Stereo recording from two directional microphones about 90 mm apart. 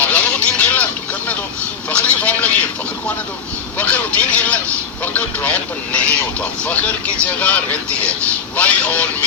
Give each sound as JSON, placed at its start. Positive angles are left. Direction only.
{"t": 0.0, "sound": "vehicle", "side_deg": 15}
{"t": 1.9, "sound": "vehicle", "side_deg": 15}
{"t": 3.8, "sound": "speech", "side_deg": 15}
{"t": 8.5, "sound": "vehicle", "side_deg": 15}